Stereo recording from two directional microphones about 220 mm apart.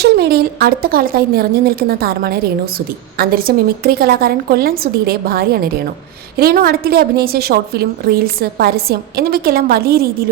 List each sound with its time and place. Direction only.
0.0 s speech: 45° right (ahead or behind)